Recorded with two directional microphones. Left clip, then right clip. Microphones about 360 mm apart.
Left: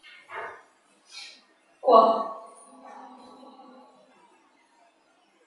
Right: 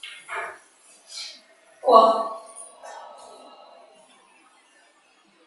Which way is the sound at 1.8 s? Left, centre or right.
Centre.